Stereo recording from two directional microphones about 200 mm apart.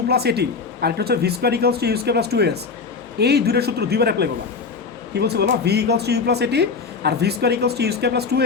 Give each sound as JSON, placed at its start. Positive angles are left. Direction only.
{"t": 0.1, "sound": "speech", "side_deg": -55}